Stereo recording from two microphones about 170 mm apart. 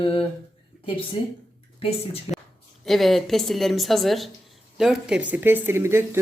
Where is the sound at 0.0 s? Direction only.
30° left (ahead or behind).